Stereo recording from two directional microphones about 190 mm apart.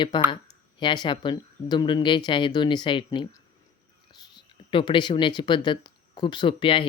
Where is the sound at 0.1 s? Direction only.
25° left (ahead or behind).